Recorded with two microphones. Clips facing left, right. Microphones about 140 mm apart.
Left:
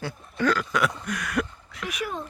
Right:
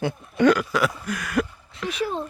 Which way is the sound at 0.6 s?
5° right (ahead or behind).